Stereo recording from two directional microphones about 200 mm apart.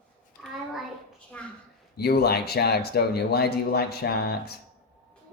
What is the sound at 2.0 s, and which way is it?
Speech, 55° left (ahead or behind).